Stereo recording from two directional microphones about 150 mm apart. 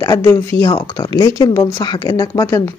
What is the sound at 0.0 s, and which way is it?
Speech, 20° left (ahead or behind).